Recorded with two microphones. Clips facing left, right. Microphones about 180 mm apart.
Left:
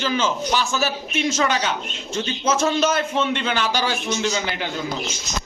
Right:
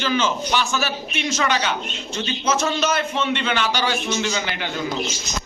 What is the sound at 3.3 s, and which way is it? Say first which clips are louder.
Speech: even; 45° left (ahead or behind).